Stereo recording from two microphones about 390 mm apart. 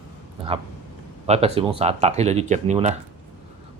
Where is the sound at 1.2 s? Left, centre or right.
Centre.